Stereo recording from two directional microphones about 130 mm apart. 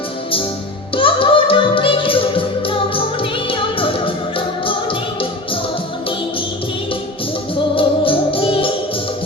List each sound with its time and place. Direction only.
0.9 s music: 40° left (ahead or behind)
7.8 s music: 45° left (ahead or behind)